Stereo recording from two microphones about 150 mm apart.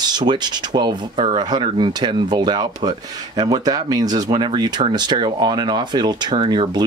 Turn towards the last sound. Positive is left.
turn(degrees=-30)  # may be behind; listen again after turning